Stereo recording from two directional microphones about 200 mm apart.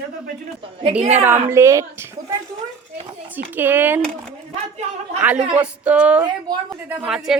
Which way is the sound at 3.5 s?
10° right (ahead or behind).